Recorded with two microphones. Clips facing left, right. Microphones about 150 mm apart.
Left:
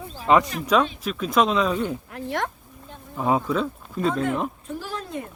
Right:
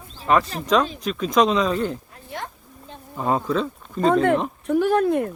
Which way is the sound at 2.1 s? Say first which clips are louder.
Left 7 dB; 75° left (ahead or behind).